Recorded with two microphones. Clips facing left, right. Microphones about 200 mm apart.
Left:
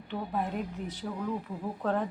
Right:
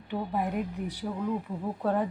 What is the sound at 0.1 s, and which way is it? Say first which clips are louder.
Speech: right 3 dB; 15° right (ahead or behind).